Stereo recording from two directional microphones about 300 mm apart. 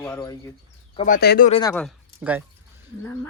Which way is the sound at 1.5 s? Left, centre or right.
Centre.